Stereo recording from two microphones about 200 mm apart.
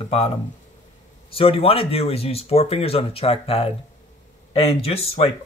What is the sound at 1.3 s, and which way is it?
Speech, 25° left (ahead or behind).